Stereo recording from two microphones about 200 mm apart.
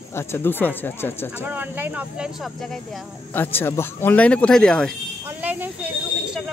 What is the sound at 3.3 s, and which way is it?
Speech, 10° left (ahead or behind).